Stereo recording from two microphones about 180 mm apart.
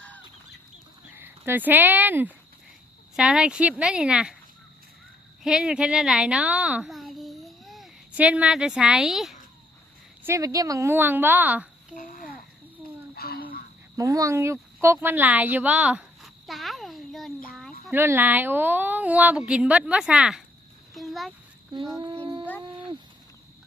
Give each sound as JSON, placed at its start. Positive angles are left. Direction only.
{"t": 1.1, "sound": "speech", "side_deg": -10}
{"t": 5.4, "sound": "a child's voice", "side_deg": -5}
{"t": 10.2, "sound": "a woman's voice", "side_deg": -20}
{"t": 11.9, "sound": "babbling", "side_deg": 50}
{"t": 13.1, "sound": "a sound", "side_deg": 60}
{"t": 13.9, "sound": "speech", "side_deg": -20}
{"t": 17.9, "sound": "a woman's voice", "side_deg": -10}
{"t": 20.9, "sound": "a sound", "side_deg": 0}
{"t": 21.7, "sound": "a sound", "side_deg": -20}